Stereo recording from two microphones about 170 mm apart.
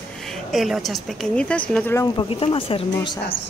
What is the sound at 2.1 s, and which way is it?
Speech, 30° left (ahead or behind).